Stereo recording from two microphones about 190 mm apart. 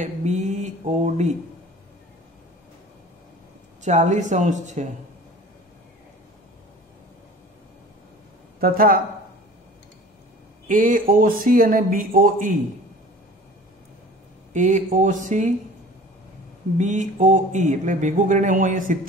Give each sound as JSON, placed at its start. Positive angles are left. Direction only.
{"t": 0.0, "sound": "mantra", "side_deg": -35}
{"t": 3.8, "sound": "speech", "side_deg": -40}
{"t": 8.5, "sound": "speech", "side_deg": -50}
{"t": 10.7, "sound": "speech", "side_deg": -45}
{"t": 14.5, "sound": "speech", "side_deg": -40}
{"t": 16.7, "sound": "speech", "side_deg": -40}